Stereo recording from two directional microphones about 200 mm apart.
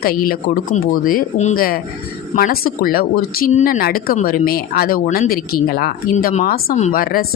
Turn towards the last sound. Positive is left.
turn(degrees=45)  # may be behind; listen again after turning